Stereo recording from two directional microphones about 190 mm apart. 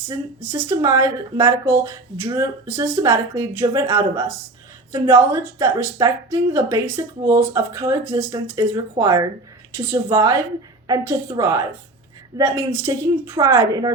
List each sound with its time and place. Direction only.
0.5 s a woman's voice: 15° right (ahead or behind)